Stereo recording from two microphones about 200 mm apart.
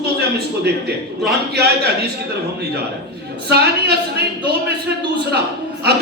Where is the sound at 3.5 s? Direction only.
55° right (ahead or behind).